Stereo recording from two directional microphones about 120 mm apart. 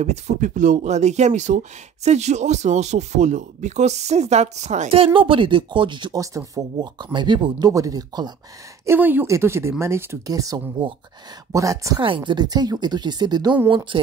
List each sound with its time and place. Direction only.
0.0 s speech: 75° right (ahead or behind); by 6.1 s 40° right (ahead or behind)
6.1 s speech: 30° right (ahead or behind)
8.8 s speech: 15° right (ahead or behind)
12.0 s speech: 45° right (ahead or behind)